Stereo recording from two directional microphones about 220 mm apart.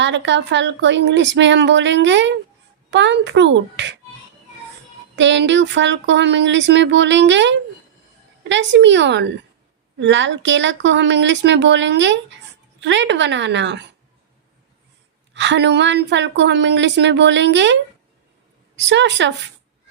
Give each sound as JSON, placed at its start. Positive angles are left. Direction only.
{"t": 0.0, "sound": "a woman's voice", "side_deg": -55}
{"t": 5.1, "sound": "a woman's voice", "side_deg": -55}
{"t": 15.3, "sound": "a woman's voice", "side_deg": -55}
{"t": 18.8, "sound": "speech", "side_deg": -55}